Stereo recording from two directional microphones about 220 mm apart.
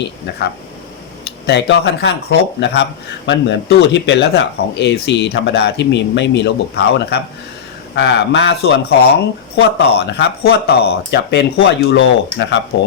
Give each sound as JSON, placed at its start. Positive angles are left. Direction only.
{"t": 1.5, "sound": "speech", "side_deg": 55}